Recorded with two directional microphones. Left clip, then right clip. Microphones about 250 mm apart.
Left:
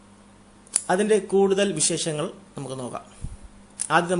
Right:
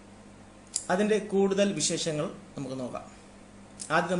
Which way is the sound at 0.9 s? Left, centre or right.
Left.